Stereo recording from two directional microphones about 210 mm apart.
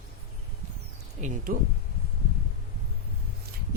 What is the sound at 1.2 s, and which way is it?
Speech, 35° right (ahead or behind).